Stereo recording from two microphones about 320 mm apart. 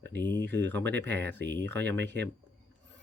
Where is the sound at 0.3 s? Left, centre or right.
Right.